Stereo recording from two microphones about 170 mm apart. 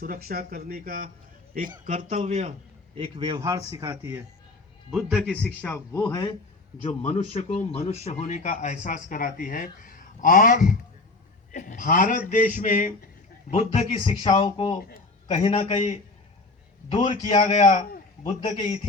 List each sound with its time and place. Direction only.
0.0 s a man's voice: 60° right (ahead or behind); by 5.5 s centre (ahead or behind)
5.6 s a man's voice: 10° left (ahead or behind)
6.8 s speech: 45° left (ahead or behind)
14.0 s speech: 30° left (ahead or behind)
17.2 s a man's voice: 45° left (ahead or behind)